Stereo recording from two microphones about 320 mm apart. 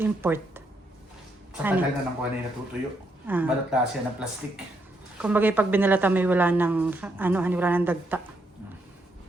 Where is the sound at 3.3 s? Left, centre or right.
Centre.